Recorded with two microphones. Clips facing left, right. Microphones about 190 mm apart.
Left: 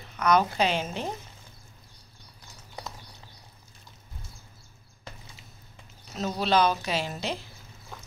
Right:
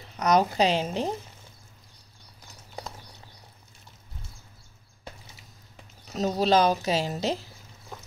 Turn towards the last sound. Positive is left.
turn(degrees=-40)  # may be behind; listen again after turning